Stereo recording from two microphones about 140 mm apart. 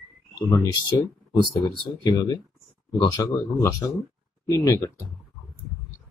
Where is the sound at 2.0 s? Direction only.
30° left (ahead or behind).